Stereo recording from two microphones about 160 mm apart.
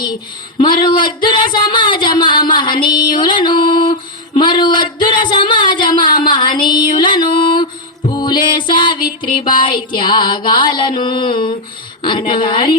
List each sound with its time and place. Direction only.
0.6 s speech: 30° left (ahead or behind)
4.4 s a sound: 30° left (ahead or behind)
9.3 s a woman's voice: 30° left (ahead or behind)
9.9 s music: 30° left (ahead or behind)
12.0 s a woman's voice: 30° left (ahead or behind)